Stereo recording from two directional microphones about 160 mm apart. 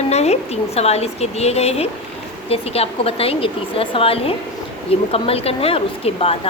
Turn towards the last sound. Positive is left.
turn(degrees=35)  # may be behind; listen again after turning